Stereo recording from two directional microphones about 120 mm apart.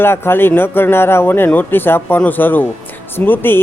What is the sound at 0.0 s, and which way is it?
Speech, 20° left (ahead or behind).